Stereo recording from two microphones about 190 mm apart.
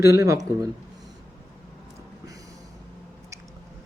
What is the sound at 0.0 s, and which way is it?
Mantra, 15° right (ahead or behind).